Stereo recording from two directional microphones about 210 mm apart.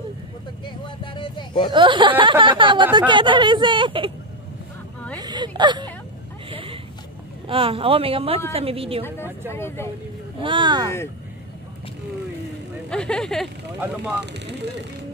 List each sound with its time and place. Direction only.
0.8 s speech: 25° left (ahead or behind)
1.7 s speech: 25° right (ahead or behind)
5.1 s a sound: 20° right (ahead or behind)
7.4 s speech: 25° right (ahead or behind)
9.0 s speech: 10° left (ahead or behind)
10.4 s speech: 20° right (ahead or behind)
12.9 s speech: 5° left (ahead or behind)